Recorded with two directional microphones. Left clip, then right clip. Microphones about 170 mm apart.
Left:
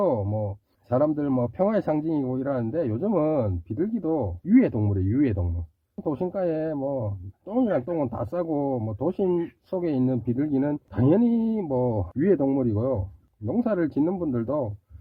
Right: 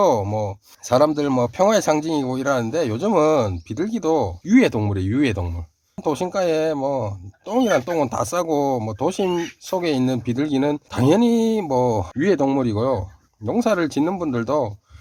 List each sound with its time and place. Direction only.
0.0 s speech: 15° right (ahead or behind)